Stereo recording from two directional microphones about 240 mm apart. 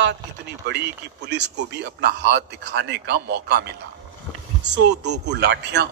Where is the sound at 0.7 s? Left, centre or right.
Right.